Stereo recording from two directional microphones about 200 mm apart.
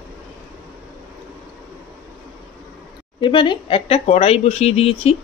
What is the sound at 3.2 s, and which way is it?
Speech, 25° left (ahead or behind).